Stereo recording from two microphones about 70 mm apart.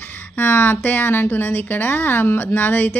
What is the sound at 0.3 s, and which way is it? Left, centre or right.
Speech, left.